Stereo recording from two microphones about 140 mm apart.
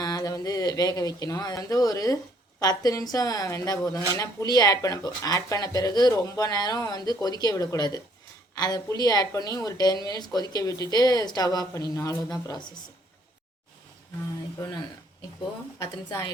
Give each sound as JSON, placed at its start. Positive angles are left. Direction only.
{"t": 0.0, "sound": "a woman's voice", "side_deg": 25}